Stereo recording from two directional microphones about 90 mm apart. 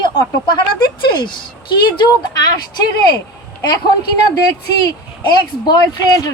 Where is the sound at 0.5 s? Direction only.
55° left (ahead or behind).